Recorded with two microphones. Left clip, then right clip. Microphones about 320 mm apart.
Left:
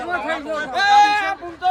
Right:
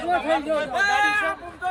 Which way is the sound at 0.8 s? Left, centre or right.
Left.